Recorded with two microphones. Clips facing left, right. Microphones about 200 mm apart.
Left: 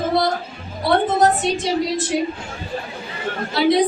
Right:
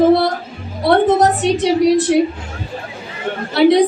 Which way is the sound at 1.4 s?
65° right (ahead or behind).